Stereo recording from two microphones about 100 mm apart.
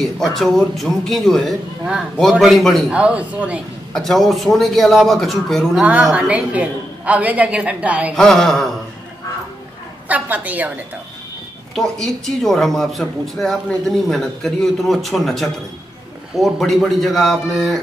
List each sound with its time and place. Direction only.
0.0 s speech: centre (ahead or behind)
2.9 s a woman's voice: 10° right (ahead or behind)
3.9 s speech: 5° left (ahead or behind)
5.8 s a woman's voice: 15° right (ahead or behind)
8.1 s speech: 5° left (ahead or behind)
10.0 s a woman's voice: 15° right (ahead or behind)
11.7 s speech: 5° left (ahead or behind)